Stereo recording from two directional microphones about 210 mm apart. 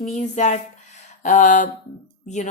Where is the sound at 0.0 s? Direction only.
35° left (ahead or behind).